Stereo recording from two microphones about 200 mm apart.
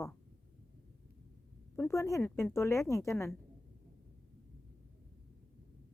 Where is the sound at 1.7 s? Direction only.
15° left (ahead or behind).